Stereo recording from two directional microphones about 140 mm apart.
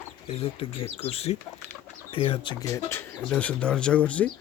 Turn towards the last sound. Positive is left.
turn(degrees=10)  # may be behind; listen again after turning